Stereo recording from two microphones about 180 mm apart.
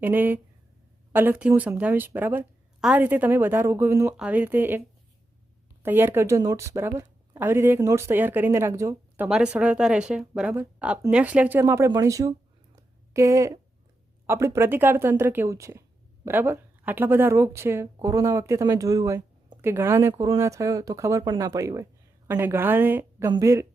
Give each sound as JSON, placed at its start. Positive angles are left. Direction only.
{"t": 0.0, "sound": "a woman's voice", "side_deg": -10}
{"t": 5.8, "sound": "a woman's voice", "side_deg": -10}
{"t": 12.7, "sound": "a sound", "side_deg": -15}
{"t": 14.3, "sound": "a woman's voice", "side_deg": -15}